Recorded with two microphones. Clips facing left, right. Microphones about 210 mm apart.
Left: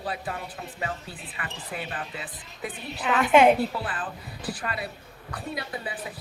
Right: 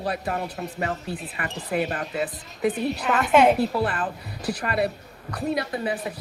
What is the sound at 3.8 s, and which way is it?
A woman's voice, 65° right (ahead or behind).